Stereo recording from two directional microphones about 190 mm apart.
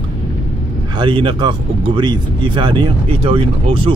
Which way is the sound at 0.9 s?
25° right (ahead or behind).